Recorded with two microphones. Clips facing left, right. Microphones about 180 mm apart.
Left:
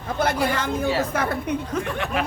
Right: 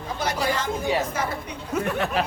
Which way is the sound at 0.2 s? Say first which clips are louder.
Left 3 dB; 55° left (ahead or behind).